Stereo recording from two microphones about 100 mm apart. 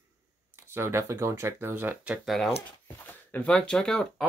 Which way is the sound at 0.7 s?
25° right (ahead or behind).